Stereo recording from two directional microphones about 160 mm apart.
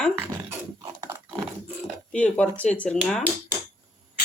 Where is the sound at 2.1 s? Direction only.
10° left (ahead or behind).